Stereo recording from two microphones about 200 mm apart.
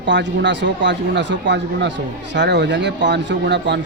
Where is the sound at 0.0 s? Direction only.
60° right (ahead or behind).